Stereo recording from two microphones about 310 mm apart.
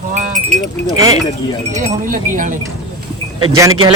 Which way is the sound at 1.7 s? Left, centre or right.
Right.